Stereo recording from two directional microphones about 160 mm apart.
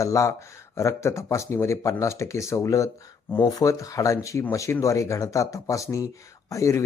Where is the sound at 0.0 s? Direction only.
20° left (ahead or behind).